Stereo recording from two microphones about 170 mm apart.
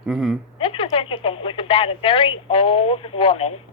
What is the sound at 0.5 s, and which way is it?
Speech, 30° left (ahead or behind).